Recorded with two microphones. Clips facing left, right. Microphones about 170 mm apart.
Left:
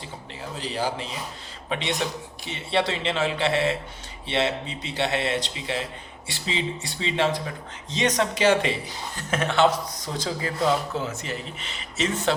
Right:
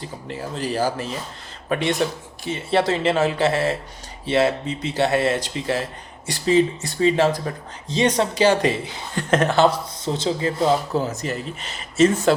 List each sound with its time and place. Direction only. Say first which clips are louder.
0.0 s a man's voice: right 6 dB; 50° right (ahead or behind)